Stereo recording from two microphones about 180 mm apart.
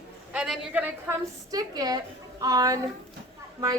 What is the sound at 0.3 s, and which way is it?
A woman's voice, 5° right (ahead or behind).